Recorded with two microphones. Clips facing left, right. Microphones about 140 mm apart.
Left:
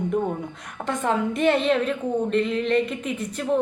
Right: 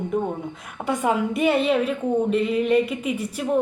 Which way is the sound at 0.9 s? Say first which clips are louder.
Right 2 dB; 10° right (ahead or behind).